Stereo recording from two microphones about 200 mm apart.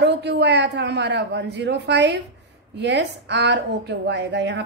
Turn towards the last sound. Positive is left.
turn(degrees=-60)  # may be behind; listen again after turning